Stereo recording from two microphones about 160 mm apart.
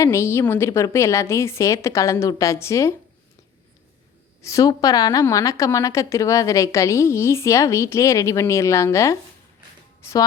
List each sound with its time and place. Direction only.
0.0 s a woman's voice: 15° left (ahead or behind)
4.4 s a woman's voice: 20° left (ahead or behind)